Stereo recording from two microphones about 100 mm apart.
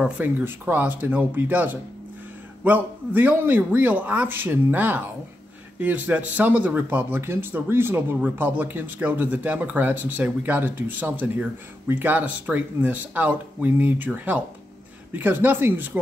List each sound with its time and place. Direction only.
0.2 s a man's voice: 20° right (ahead or behind)